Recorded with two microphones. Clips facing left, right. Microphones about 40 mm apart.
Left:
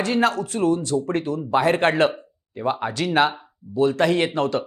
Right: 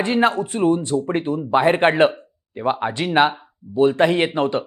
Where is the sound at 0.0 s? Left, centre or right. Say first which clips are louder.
Right 2 dB; right.